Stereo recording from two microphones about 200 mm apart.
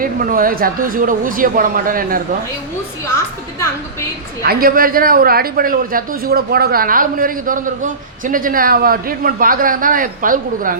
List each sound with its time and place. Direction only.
0.0 s a man's voice: 45° right (ahead or behind)
4.4 s a man's voice: 45° right (ahead or behind)